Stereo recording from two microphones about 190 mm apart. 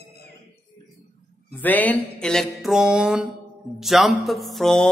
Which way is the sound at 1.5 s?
10° left (ahead or behind).